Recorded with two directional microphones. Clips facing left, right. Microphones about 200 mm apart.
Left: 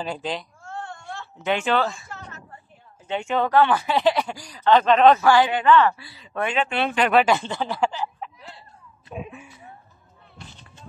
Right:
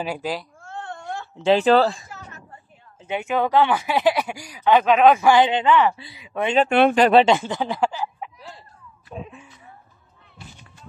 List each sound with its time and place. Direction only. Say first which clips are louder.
0.0 s speech: right 2 dB; 10° right (ahead or behind)
1.4 s speech: right 7 dB; 35° right (ahead or behind)
3.1 s speech: right 1 dB; 5° right (ahead or behind)
6.7 s speech: right 9 dB; 55° right (ahead or behind)
7.0 s speech: right 1 dB; 30° right (ahead or behind)
7.3 s speech: right 2 dB; 15° right (ahead or behind)
8.4 s a sound: right 2 dB; 40° right (ahead or behind)
9.1 s speech: left 1 dB; 15° left (ahead or behind)